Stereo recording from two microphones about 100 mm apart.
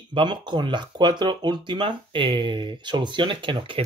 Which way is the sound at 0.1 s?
50° right (ahead or behind).